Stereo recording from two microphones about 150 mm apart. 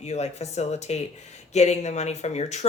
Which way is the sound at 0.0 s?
45° left (ahead or behind).